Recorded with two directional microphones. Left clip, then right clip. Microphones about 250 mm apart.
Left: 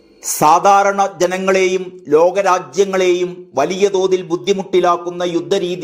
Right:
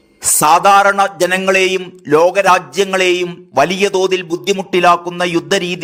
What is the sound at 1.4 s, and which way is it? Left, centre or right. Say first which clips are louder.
A man's voice: right 1 dB; right.